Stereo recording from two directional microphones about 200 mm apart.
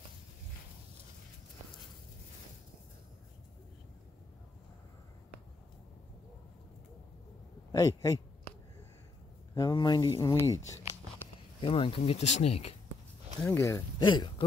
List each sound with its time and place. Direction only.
7.7 s a man's voice: 15° left (ahead or behind)
9.6 s speech: 20° left (ahead or behind)
11.6 s speech: 25° left (ahead or behind)
13.4 s speech: 15° left (ahead or behind)